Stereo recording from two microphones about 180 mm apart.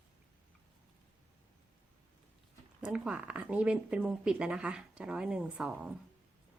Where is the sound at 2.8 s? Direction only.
5° right (ahead or behind).